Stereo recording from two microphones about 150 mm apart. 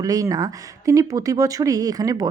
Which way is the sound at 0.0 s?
25° right (ahead or behind).